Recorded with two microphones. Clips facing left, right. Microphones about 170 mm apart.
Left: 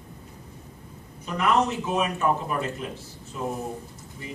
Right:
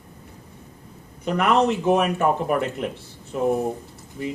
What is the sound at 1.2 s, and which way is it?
A man's voice, 65° right (ahead or behind).